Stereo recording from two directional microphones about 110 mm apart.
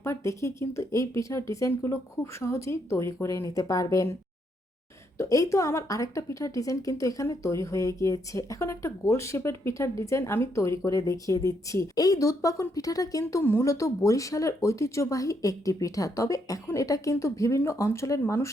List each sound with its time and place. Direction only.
0.0 s a woman's voice: 25° left (ahead or behind)
5.1 s a woman's voice: 30° left (ahead or behind)